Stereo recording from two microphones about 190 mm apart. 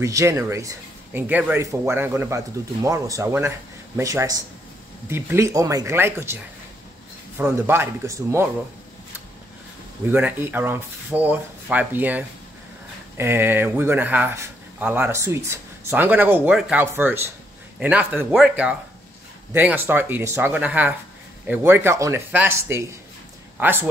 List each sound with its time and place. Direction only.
0.0 s speech: 15° right (ahead or behind)
7.3 s speech: 10° right (ahead or behind)
10.1 s speech: 10° right (ahead or behind)